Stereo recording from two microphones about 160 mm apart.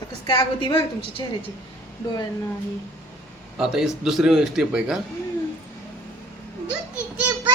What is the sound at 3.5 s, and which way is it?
A man's voice, centre (ahead or behind).